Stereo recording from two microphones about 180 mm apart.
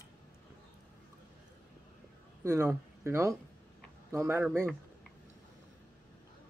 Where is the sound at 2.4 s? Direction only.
15° right (ahead or behind).